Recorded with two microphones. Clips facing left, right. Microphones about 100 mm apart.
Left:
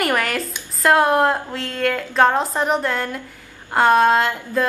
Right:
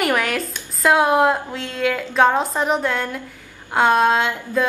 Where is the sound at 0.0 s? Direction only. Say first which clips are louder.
Even; centre (ahead or behind).